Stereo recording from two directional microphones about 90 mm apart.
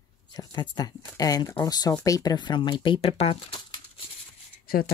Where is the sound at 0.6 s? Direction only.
50° left (ahead or behind).